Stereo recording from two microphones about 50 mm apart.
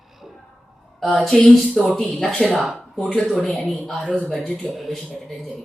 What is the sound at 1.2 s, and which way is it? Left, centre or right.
A woman's voice, centre.